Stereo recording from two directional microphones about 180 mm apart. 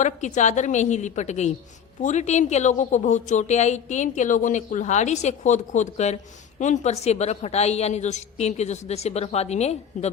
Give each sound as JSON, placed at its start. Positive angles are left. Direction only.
{"t": 0.0, "sound": "a woman's voice", "side_deg": 40}